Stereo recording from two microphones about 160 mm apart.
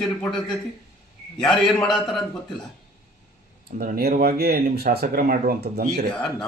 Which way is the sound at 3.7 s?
65° right (ahead or behind).